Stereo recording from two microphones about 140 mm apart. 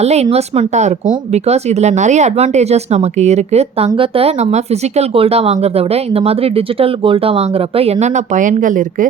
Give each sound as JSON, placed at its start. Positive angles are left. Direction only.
{"t": 0.0, "sound": "speech", "side_deg": -50}